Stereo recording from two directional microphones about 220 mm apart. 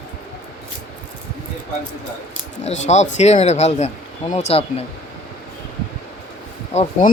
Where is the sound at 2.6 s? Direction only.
30° left (ahead or behind).